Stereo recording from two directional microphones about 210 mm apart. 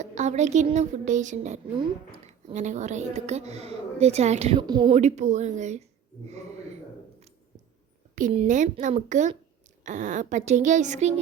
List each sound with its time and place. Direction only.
0.0 s speech: 35° right (ahead or behind)
4.6 s speech: 20° right (ahead or behind)
4.9 s speech: 35° right (ahead or behind)
8.3 s speech: 30° right (ahead or behind)